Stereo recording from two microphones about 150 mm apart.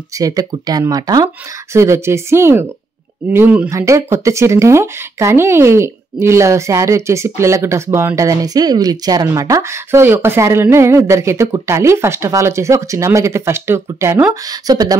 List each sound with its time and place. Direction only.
0.2 s speech: 25° right (ahead or behind)